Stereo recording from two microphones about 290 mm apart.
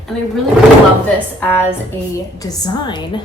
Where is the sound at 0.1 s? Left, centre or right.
Centre.